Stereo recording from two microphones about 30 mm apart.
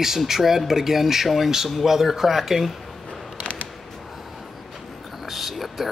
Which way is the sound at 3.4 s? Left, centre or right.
Left.